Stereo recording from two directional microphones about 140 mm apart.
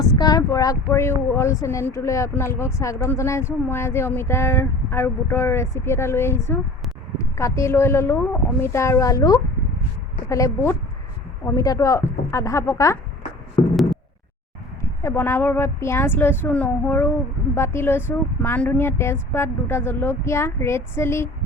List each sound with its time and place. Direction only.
0.0 s speech: 25° left (ahead or behind)
14.8 s speech: 20° left (ahead or behind)